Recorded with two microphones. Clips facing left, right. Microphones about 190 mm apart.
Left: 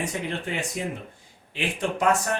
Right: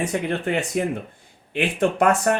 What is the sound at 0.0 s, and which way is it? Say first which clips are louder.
Speech: right 6 dB; 60° right (ahead or behind).